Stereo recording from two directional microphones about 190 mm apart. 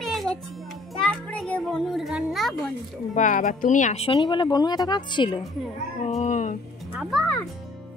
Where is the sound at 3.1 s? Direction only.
40° left (ahead or behind); by 5.4 s 25° left (ahead or behind).